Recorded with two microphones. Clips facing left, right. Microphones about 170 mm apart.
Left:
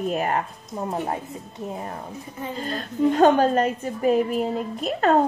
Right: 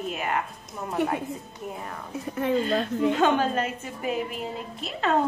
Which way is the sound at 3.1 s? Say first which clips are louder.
Left 7 dB; 40° left (ahead or behind).